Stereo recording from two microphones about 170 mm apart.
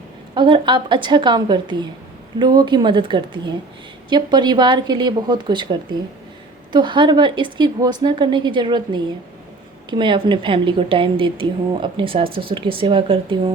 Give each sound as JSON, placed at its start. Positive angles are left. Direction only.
{"t": 0.3, "sound": "a woman's voice", "side_deg": -25}
{"t": 6.7, "sound": "a woman's voice", "side_deg": -30}